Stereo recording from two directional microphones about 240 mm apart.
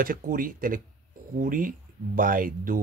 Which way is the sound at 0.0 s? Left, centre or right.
Right.